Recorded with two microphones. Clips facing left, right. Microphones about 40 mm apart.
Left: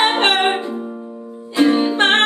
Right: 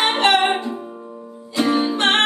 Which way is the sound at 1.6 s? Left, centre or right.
Centre.